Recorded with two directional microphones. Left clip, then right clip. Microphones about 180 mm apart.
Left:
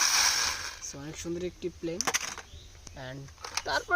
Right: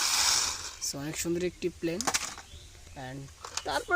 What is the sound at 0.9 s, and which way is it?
Speech, 50° right (ahead or behind).